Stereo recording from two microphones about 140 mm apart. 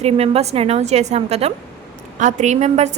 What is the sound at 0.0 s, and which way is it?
A woman's voice, 50° right (ahead or behind).